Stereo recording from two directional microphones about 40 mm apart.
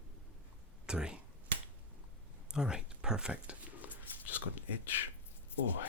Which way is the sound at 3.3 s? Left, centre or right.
Right.